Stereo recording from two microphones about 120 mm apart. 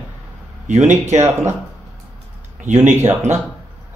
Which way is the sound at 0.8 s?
70° right (ahead or behind).